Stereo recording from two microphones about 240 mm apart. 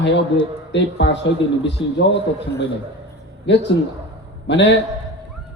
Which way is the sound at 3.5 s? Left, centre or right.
Left.